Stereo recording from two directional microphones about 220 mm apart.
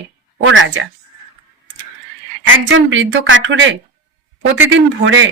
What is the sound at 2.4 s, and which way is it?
Speech, 60° right (ahead or behind).